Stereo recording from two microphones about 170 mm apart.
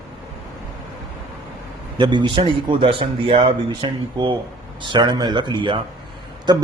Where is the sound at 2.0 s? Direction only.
25° right (ahead or behind).